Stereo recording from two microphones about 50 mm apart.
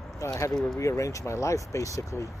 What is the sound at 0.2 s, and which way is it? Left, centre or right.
Speech, left.